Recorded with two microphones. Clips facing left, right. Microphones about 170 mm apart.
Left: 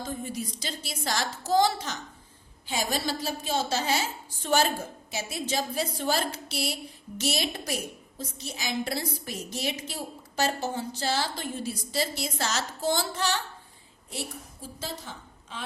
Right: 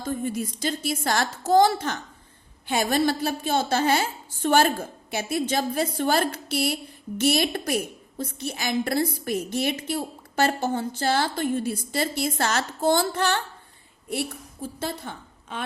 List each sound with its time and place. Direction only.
0.0 s a woman's voice: 50° right (ahead or behind)
14.8 s a woman's voice: 55° right (ahead or behind)